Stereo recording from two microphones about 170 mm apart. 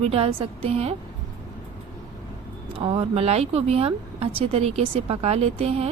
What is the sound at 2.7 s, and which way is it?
Speech, 30° right (ahead or behind).